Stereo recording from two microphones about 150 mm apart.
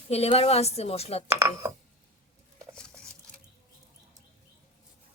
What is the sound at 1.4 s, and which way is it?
Speech, 25° right (ahead or behind).